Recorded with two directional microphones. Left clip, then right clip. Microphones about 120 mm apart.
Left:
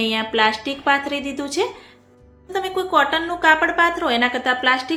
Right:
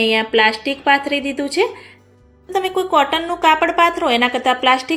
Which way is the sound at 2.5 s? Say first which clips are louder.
Right 3 dB; 25° right (ahead or behind).